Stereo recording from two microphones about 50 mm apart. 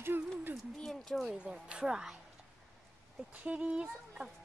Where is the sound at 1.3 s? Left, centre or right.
Centre.